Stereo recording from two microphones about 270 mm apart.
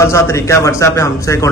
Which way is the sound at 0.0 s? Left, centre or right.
Centre.